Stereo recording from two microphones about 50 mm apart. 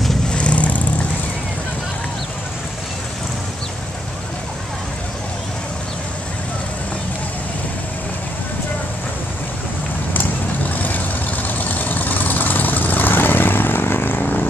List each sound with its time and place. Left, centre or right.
0.3 s vehicle: left
10.7 s vehicle: left